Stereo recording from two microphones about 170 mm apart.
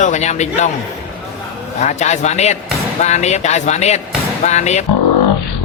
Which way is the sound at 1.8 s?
40° left (ahead or behind).